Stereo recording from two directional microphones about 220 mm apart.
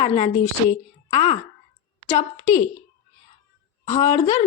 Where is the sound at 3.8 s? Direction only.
30° left (ahead or behind).